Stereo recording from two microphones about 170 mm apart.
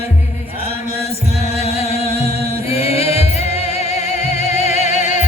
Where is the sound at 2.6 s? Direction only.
35° left (ahead or behind).